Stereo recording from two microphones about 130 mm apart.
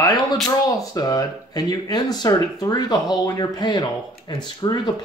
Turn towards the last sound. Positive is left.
turn(degrees=35)  # may be behind; listen again after turning